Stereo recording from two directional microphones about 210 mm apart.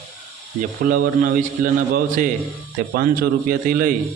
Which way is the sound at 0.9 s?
40° right (ahead or behind).